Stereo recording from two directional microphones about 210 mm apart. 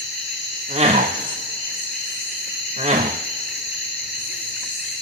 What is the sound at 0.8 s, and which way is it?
Cricket, 30° right (ahead or behind).